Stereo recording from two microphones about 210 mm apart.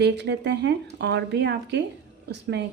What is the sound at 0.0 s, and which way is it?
Speech, 55° right (ahead or behind).